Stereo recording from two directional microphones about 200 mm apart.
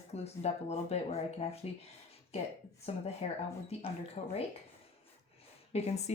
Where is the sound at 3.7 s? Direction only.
30° left (ahead or behind).